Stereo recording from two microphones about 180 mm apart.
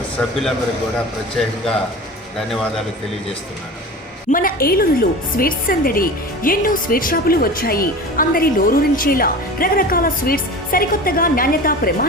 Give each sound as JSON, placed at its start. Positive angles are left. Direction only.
{"t": 0.2, "sound": "a man's voice", "side_deg": 5}
{"t": 4.3, "sound": "a woman's voice", "side_deg": 50}